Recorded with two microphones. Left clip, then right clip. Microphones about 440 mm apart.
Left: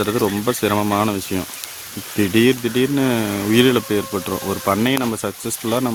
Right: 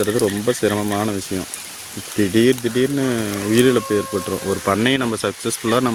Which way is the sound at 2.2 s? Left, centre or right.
Left.